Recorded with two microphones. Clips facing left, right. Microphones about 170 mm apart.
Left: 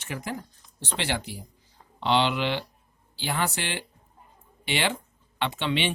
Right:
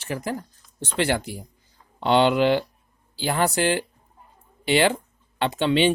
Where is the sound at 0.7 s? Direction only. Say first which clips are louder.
Right 7 dB; 45° right (ahead or behind).